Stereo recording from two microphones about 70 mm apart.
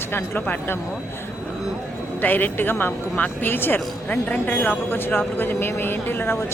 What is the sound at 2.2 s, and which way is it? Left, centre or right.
Speech, left.